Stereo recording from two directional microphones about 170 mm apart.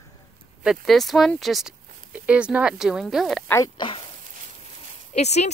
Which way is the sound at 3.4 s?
20° left (ahead or behind).